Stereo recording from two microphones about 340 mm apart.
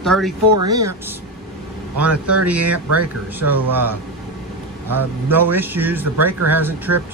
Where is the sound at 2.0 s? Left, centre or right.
Centre.